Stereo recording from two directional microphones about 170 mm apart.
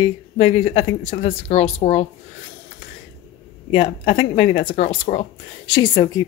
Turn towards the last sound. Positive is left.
turn(degrees=25)  # may be behind; listen again after turning